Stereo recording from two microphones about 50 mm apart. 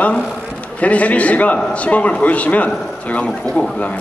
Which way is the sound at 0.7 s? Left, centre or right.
Left.